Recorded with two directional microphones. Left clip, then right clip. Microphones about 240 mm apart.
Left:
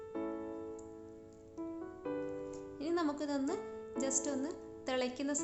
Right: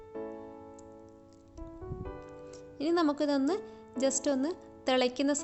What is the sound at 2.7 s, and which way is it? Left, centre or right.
Speech, right.